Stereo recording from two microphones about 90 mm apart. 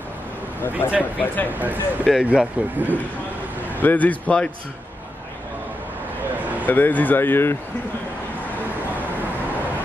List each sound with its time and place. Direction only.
0.6 s speech: 25° left (ahead or behind)
1.5 s speech: 20° right (ahead or behind)
3.8 s speech: 20° left (ahead or behind)
6.6 s speech: 20° left (ahead or behind)